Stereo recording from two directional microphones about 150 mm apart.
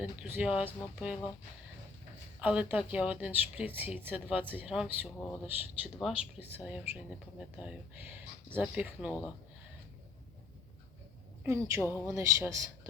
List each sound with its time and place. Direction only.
0.0 s speech: 10° right (ahead or behind)
2.4 s speech: 10° right (ahead or behind)
11.4 s speech: 20° right (ahead or behind)